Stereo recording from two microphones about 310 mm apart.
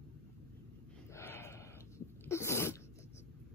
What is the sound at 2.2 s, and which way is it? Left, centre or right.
Sneeze, centre.